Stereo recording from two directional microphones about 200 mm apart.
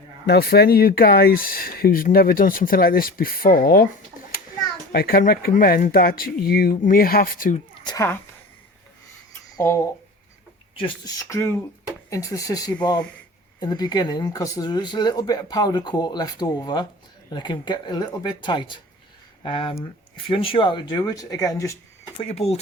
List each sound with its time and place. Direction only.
0.3 s speech: 50° left (ahead or behind)
4.9 s speech: 50° left (ahead or behind)
7.9 s speech: 15° left (ahead or behind)
9.6 s speech: 15° left (ahead or behind)
22.2 s speech: 30° left (ahead or behind)